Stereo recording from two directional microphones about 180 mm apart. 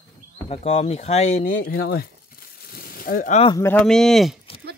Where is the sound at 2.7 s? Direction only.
55° left (ahead or behind).